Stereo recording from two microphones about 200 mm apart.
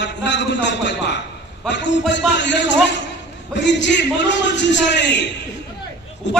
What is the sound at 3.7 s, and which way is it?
A man's voice, 60° left (ahead or behind).